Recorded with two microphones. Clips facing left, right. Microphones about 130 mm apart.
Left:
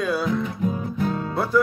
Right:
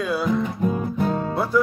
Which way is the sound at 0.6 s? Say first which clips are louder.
Right 2 dB; 50° right (ahead or behind).